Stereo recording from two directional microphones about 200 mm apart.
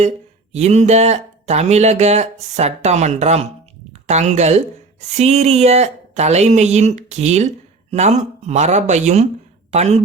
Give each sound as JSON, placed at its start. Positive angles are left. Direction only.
{"t": 0.5, "sound": "speech", "side_deg": -35}